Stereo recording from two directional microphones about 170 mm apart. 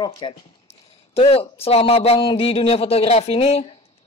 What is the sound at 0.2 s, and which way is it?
Speech, 25° left (ahead or behind).